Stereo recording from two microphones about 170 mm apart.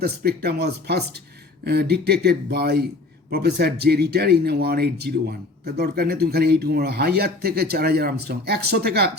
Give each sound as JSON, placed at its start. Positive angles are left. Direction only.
{"t": 0.0, "sound": "speech", "side_deg": -65}